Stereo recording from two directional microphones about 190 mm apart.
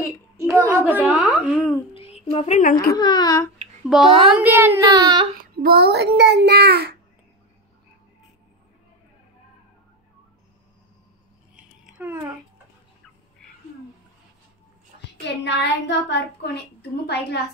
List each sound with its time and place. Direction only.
0.7 s a woman's voice: 10° right (ahead or behind)
2.0 s a sound: 30° left (ahead or behind)
2.9 s speech: 20° left (ahead or behind)
3.9 s a child's voice: centre (ahead or behind)
4.9 s speech: 25° right (ahead or behind)
5.6 s a child's voice: 55° right (ahead or behind)
11.5 s a sound: 10° right (ahead or behind)
15.0 s a child's voice: 70° left (ahead or behind)